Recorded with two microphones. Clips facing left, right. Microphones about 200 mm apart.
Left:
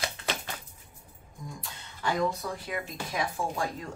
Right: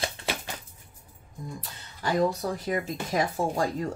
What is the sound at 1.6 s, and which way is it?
Speech, 35° right (ahead or behind).